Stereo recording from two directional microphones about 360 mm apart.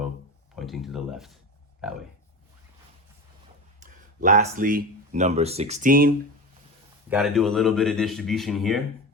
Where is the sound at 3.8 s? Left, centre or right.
Right.